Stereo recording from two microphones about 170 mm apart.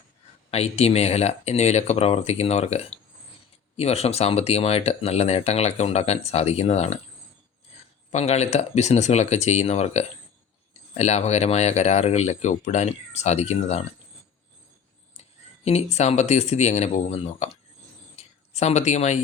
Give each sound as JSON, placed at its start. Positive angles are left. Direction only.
{"t": 0.5, "sound": "speech", "side_deg": 35}
{"t": 8.1, "sound": "speech", "side_deg": 40}
{"t": 15.2, "sound": "speech", "side_deg": 40}
{"t": 18.2, "sound": "a sound", "side_deg": 40}